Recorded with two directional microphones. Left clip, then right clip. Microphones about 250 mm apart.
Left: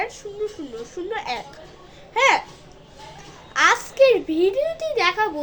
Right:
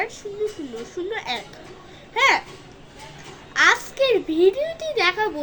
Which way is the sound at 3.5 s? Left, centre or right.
Centre.